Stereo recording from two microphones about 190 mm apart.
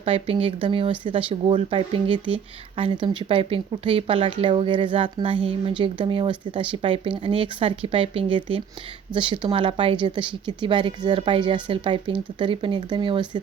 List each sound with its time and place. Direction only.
0.0 s speech: 30° right (ahead or behind)